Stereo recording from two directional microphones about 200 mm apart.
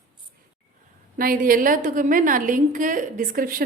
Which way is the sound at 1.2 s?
45° right (ahead or behind).